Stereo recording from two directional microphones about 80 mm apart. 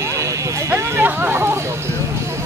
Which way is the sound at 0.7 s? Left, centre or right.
Right.